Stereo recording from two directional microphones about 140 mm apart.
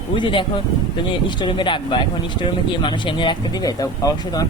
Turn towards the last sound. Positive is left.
turn(degrees=25)  # may be behind; listen again after turning